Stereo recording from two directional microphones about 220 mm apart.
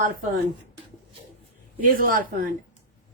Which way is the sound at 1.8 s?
40° right (ahead or behind).